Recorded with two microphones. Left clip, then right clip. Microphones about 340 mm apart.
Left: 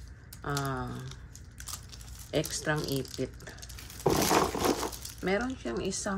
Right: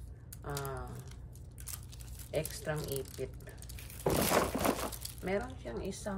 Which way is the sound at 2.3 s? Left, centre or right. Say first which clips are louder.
Left 6 dB; left.